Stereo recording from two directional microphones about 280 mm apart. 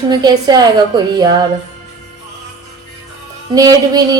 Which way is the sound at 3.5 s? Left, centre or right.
Centre.